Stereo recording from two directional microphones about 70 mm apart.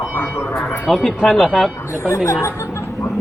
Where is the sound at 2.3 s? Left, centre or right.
Left.